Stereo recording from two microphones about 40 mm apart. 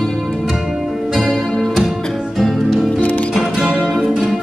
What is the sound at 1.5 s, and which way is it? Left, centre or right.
Music, centre.